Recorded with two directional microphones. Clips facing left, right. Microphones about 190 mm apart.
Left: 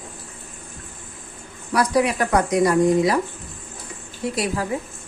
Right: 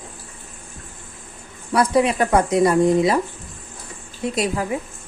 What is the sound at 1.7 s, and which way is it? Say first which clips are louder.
A woman's voice: right 2 dB; 25° right (ahead or behind).